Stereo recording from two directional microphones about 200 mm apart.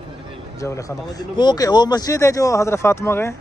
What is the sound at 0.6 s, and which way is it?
Speech, 15° left (ahead or behind).